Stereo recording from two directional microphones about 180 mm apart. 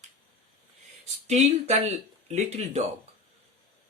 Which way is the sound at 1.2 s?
35° right (ahead or behind).